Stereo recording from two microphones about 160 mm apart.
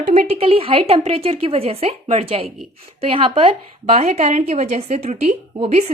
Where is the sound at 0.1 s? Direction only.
45° right (ahead or behind).